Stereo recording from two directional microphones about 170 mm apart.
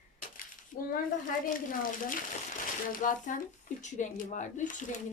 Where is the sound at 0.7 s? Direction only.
50° left (ahead or behind).